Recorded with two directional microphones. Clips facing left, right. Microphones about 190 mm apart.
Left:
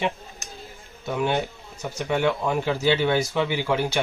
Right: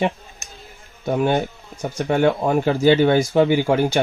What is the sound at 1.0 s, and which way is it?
Speech, 45° right (ahead or behind).